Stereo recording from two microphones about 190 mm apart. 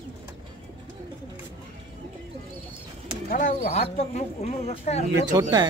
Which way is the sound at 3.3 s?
45° left (ahead or behind).